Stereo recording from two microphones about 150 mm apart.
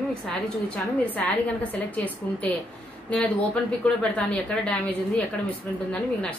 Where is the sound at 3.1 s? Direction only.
5° left (ahead or behind).